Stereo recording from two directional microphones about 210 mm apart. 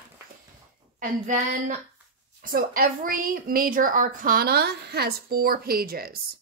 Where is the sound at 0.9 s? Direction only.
35° right (ahead or behind).